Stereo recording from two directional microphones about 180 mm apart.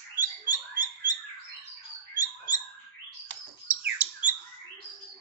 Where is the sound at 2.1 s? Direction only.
20° left (ahead or behind).